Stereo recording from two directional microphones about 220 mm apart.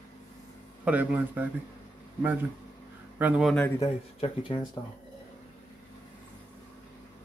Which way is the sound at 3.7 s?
20° left (ahead or behind).